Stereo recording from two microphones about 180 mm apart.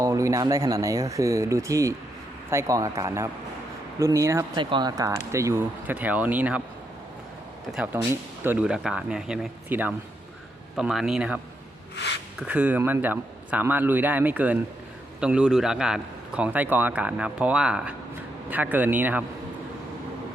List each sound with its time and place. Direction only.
0.0 s speech: 20° right (ahead or behind)
7.7 s a man's voice: 5° right (ahead or behind)
12.4 s a man's voice: 5° right (ahead or behind)